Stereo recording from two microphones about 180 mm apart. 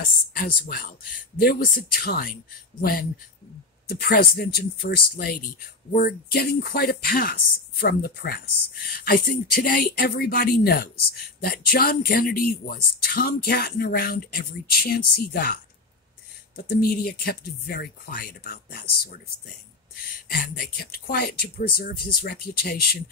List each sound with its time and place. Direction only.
0.3 s speech: 55° left (ahead or behind)
16.5 s speech: 60° left (ahead or behind)